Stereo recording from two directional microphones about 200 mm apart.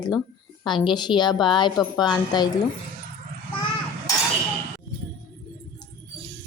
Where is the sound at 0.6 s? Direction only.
25° left (ahead or behind).